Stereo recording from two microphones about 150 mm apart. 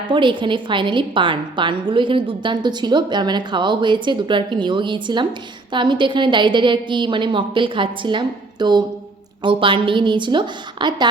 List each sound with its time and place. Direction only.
0.1 s a woman's voice: 35° right (ahead or behind)